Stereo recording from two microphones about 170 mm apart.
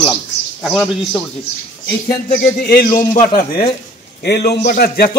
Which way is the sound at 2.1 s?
60° left (ahead or behind).